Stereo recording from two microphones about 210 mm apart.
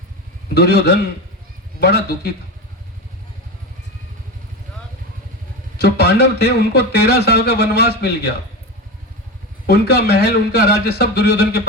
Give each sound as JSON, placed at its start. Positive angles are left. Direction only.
{"t": 0.5, "sound": "speech", "side_deg": 50}
{"t": 5.7, "sound": "speech", "side_deg": 50}
{"t": 9.6, "sound": "speech", "side_deg": 50}